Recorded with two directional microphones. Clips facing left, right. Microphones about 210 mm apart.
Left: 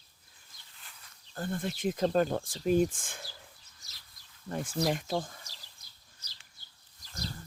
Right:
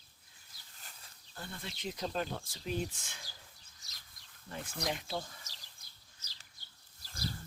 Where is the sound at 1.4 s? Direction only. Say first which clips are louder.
Left 11 dB; 50° left (ahead or behind).